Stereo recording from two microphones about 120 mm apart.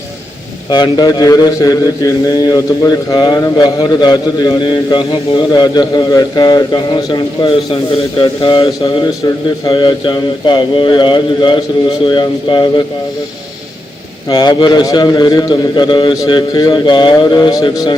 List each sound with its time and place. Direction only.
0.7 s a man's voice: 35° left (ahead or behind)
5.5 s a man's voice: 35° left (ahead or behind)
14.3 s a man's voice: 35° left (ahead or behind)